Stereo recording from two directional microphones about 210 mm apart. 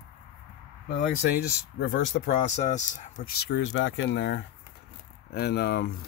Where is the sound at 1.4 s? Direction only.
50° left (ahead or behind).